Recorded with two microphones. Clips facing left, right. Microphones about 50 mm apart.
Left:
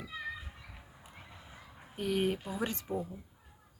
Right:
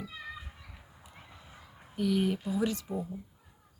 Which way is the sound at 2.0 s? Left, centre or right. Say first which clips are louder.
Right 3 dB; left.